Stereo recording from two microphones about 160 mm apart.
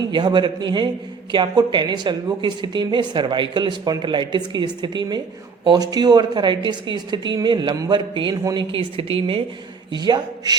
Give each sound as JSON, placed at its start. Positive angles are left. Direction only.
{"t": 0.1, "sound": "a woman's voice", "side_deg": -30}